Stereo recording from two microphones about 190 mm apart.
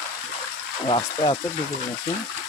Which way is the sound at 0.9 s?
25° left (ahead or behind).